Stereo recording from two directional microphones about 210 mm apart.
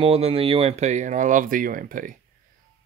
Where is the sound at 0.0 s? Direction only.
30° right (ahead or behind).